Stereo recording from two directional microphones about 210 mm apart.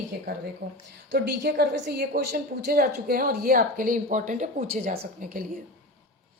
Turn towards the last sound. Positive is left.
turn(degrees=-40)  # may be behind; listen again after turning